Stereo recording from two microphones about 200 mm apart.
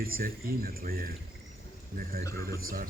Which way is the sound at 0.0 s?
45° right (ahead or behind).